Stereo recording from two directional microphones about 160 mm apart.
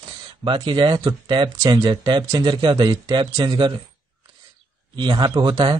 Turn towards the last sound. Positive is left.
turn(degrees=-25)  # may be behind; listen again after turning